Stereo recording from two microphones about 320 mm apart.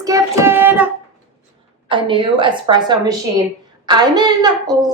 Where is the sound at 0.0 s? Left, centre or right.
Centre.